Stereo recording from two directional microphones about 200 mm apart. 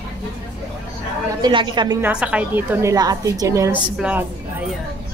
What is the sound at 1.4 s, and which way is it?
Speech, 20° right (ahead or behind).